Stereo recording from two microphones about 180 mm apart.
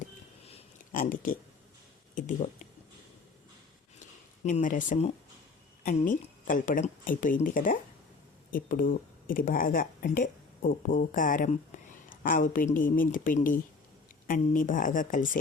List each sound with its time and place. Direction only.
0.0 s a sound: 35° left (ahead or behind)
0.9 s speech: 50° left (ahead or behind)
4.4 s speech: 45° left (ahead or behind)